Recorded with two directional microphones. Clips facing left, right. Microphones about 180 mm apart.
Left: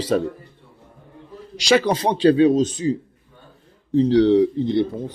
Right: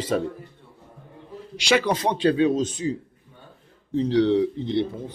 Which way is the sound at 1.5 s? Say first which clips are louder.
Left 4 dB; 35° left (ahead or behind).